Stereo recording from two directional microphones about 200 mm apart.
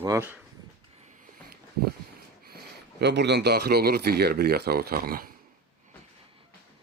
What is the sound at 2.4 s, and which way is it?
Speech, 50° right (ahead or behind).